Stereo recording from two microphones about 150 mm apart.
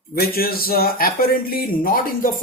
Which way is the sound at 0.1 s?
85° left.